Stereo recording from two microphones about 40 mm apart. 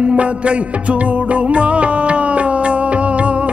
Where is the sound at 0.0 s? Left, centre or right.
Right.